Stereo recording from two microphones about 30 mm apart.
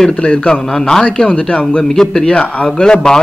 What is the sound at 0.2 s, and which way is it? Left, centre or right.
Speech, left.